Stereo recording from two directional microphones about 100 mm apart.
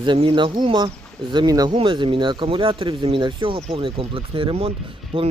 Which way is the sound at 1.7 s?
60° right (ahead or behind).